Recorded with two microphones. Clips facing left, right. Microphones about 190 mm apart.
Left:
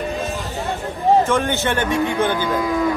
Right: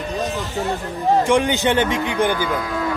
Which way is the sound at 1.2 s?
15° right (ahead or behind).